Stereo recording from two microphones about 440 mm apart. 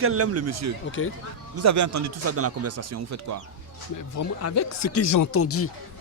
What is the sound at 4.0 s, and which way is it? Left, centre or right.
Speech, left.